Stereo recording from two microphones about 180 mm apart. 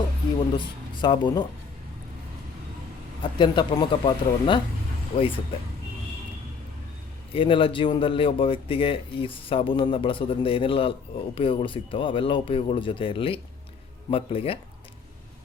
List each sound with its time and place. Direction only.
0.3 s speech: 25° left (ahead or behind)
3.3 s speech: 25° left (ahead or behind)
7.3 s speech: 30° left (ahead or behind)